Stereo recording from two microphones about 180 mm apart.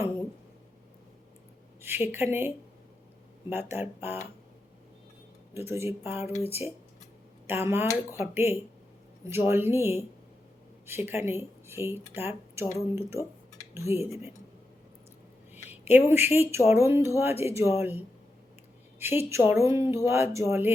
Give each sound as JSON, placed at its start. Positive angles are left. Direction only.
{"t": 1.8, "sound": "a woman's voice", "side_deg": -10}
{"t": 3.5, "sound": "speech", "side_deg": -10}
{"t": 5.5, "sound": "speech", "side_deg": -15}
{"t": 13.7, "sound": "speech", "side_deg": -15}
{"t": 15.5, "sound": "a woman's voice", "side_deg": -10}